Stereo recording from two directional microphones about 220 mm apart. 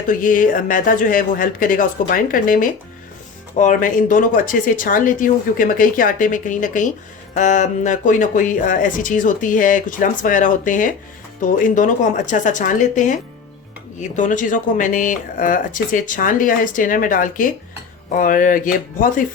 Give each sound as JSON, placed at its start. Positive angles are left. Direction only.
{"t": 0.1, "sound": "speech", "side_deg": 40}